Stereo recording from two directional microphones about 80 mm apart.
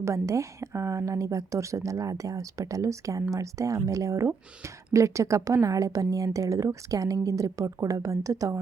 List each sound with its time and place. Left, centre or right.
0.0 s a woman's voice: right